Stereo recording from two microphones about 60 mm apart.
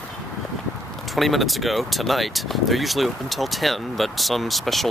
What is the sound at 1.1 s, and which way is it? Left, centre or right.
Speech, centre.